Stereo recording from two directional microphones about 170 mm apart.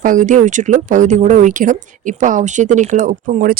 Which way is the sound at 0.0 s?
50° right (ahead or behind).